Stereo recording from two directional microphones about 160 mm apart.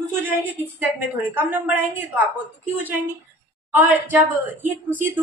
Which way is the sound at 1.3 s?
10° right (ahead or behind).